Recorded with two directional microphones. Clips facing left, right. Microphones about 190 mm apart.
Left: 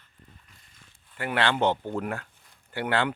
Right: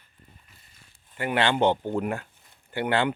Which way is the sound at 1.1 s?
15° right (ahead or behind).